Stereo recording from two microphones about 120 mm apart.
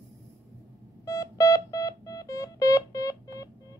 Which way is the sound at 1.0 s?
30° left (ahead or behind).